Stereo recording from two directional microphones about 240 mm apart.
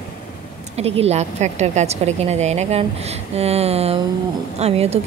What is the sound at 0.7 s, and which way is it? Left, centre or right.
Speech, right.